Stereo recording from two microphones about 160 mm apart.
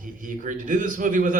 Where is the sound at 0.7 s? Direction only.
55° right (ahead or behind).